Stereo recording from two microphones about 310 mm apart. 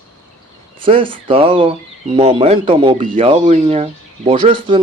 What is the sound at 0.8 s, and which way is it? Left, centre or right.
Speech, centre.